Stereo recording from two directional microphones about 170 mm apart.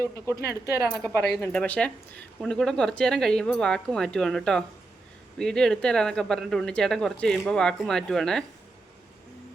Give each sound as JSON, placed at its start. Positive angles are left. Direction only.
{"t": 0.3, "sound": "speech", "side_deg": 20}